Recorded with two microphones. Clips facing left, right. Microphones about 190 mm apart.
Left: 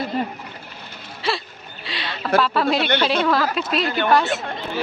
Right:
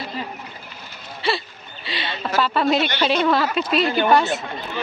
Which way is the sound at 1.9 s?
Centre (ahead or behind).